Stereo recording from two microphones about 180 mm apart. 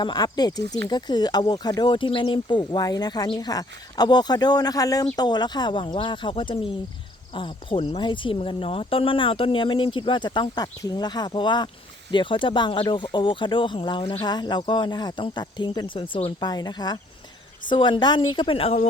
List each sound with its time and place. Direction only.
0.0 s speech: 25° left (ahead or behind)